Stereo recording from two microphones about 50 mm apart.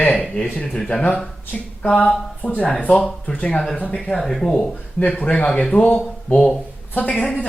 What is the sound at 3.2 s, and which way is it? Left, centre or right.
Speech, left.